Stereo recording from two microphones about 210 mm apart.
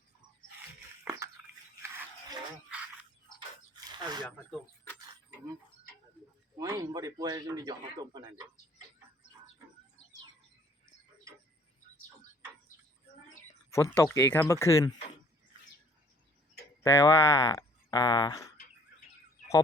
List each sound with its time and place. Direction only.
1.1 s a sound: 5° right (ahead or behind)
3.8 s a sound: 20° right (ahead or behind)
4.2 s speech: 5° left (ahead or behind)
6.6 s speech: 15° right (ahead or behind)
13.7 s speech: 15° left (ahead or behind)
16.9 s speech: 15° left (ahead or behind)